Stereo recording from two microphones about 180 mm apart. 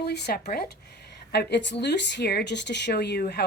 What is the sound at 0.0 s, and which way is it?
Speech, 65° left (ahead or behind).